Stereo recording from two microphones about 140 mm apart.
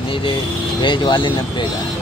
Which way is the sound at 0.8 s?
35° left (ahead or behind).